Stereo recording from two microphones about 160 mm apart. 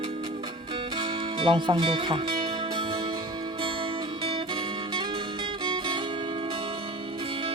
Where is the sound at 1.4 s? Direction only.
30° right (ahead or behind).